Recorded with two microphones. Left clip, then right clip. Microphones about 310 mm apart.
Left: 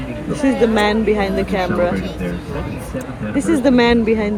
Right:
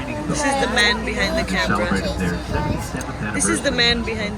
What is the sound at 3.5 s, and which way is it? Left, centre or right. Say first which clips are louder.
Speech: left 5 dB; centre.